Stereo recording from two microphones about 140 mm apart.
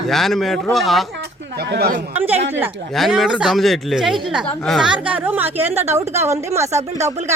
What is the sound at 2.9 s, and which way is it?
A woman's voice, centre (ahead or behind).